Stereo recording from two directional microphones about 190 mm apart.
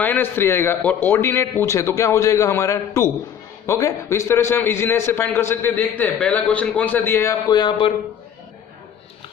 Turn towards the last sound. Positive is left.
turn(degrees=25)  # may be behind; listen again after turning